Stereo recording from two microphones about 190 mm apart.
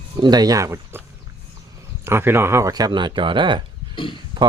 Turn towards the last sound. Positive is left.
turn(degrees=-25)  # may be behind; listen again after turning